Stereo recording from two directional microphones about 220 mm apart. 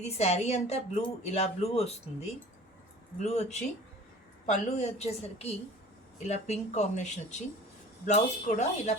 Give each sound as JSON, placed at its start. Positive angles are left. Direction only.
{"t": 0.0, "sound": "speech", "side_deg": 30}